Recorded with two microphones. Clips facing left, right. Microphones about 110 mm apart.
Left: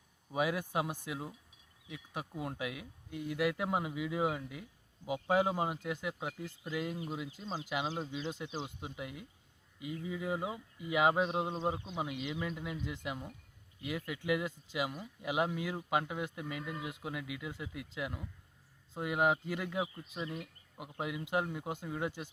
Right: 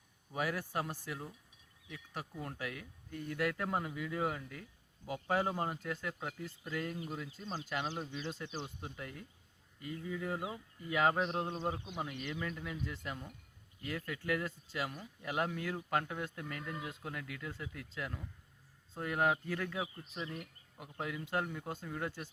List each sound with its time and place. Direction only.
0.3 s a man's voice: 15° left (ahead or behind)